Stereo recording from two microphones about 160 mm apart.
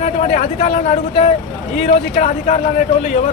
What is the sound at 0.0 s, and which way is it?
Speech, 45° left (ahead or behind).